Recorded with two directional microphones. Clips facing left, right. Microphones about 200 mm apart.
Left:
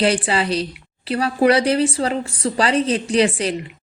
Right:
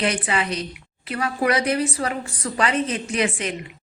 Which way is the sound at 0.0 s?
30° left (ahead or behind).